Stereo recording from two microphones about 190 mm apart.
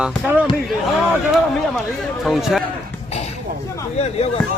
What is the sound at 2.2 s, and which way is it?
Speech, centre (ahead or behind).